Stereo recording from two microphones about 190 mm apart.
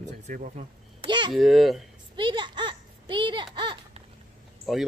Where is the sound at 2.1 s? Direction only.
25° right (ahead or behind).